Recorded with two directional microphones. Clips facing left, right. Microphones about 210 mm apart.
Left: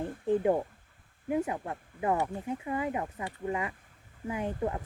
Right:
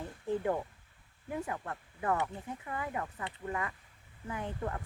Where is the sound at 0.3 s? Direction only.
20° left (ahead or behind).